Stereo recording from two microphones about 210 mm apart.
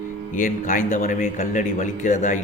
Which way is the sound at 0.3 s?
40° left (ahead or behind).